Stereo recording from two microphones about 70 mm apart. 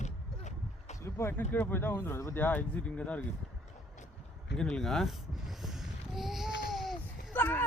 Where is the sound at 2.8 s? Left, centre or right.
Centre.